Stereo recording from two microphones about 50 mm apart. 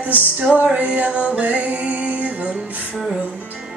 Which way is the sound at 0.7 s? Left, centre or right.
Right.